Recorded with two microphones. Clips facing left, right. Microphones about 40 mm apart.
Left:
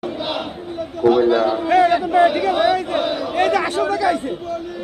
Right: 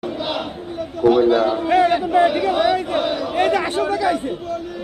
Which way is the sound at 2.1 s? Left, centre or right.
Centre.